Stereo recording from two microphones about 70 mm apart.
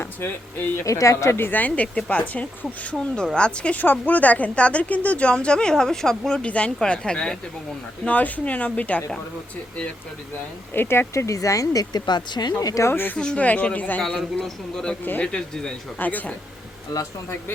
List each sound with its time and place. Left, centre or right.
0.0 s speech: left
0.9 s a woman's voice: left; by 7.3 s centre
8.0 s a woman's voice: left
10.8 s speech: left
12.9 s a woman's voice: left
13.1 s a woman's voice: centre
14.2 s speech: centre
15.0 s a woman's voice: left
15.3 s speech: centre
16.0 s a woman's voice: left